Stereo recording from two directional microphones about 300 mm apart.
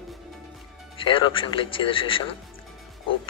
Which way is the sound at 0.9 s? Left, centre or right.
Centre.